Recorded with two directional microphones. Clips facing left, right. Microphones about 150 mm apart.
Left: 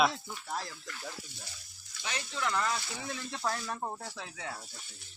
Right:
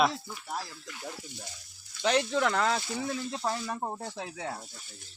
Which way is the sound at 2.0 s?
70° right (ahead or behind).